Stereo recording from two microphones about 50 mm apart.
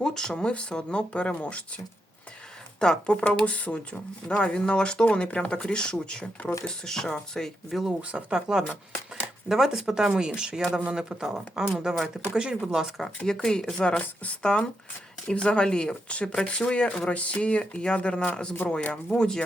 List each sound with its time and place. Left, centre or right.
0.0 s speech: centre
2.8 s speech: centre
8.1 s speech: centre
13.1 s speech: centre